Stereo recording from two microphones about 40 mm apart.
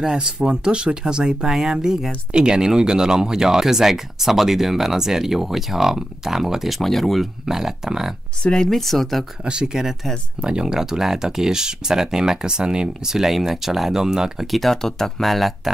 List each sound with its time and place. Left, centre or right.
0.0 s speech: right
6.7 s speech: centre
7.4 s speech: centre
8.6 s speech: centre
9.4 s speech: right
14.4 s speech: centre
14.8 s speech: centre